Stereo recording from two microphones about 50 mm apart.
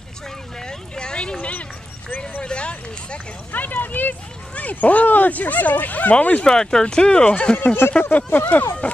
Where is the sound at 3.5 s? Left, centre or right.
Left.